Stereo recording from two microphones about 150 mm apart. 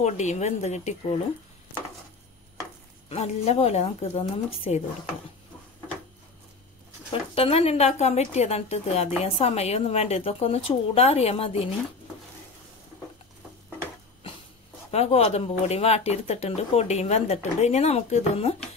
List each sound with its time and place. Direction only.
0.0 s speech: 50° left (ahead or behind)
3.1 s speech: 45° left (ahead or behind)
7.1 s speech: 40° left (ahead or behind)
14.9 s speech: 45° left (ahead or behind)